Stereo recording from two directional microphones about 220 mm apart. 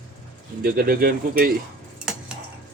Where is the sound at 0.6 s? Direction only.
45° right (ahead or behind).